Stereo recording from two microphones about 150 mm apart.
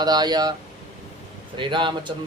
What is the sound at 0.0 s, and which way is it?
Speech, 30° right (ahead or behind).